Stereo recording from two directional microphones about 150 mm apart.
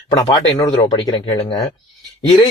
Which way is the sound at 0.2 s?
25° left (ahead or behind).